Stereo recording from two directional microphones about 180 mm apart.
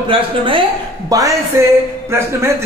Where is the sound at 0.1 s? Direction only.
30° right (ahead or behind).